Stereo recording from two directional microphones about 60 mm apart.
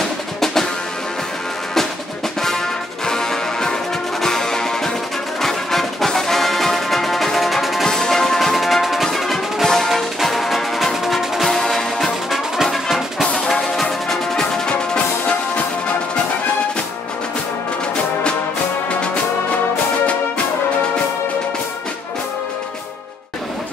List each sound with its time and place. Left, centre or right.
3.1 s music: centre